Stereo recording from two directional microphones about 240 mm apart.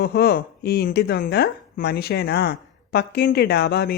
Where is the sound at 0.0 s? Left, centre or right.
Left.